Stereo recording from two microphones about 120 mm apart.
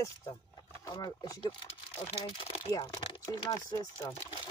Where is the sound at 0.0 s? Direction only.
30° left (ahead or behind).